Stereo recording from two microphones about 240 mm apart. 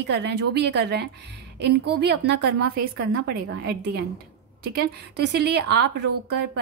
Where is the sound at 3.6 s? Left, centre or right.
Right.